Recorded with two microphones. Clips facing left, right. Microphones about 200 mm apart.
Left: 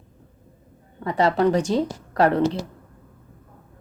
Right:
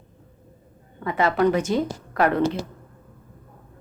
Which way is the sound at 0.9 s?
35° left (ahead or behind).